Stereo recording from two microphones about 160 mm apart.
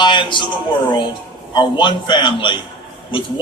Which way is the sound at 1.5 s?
30° left (ahead or behind).